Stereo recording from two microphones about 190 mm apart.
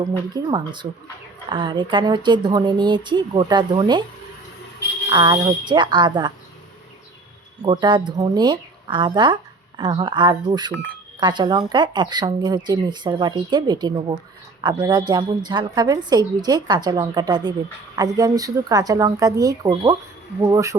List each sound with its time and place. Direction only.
0.0 s speech: 20° right (ahead or behind)
5.0 s speech: 25° right (ahead or behind)
7.6 s speech: 25° right (ahead or behind)